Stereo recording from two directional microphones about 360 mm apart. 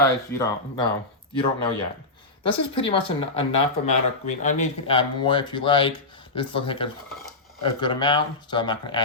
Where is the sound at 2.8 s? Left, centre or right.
Centre.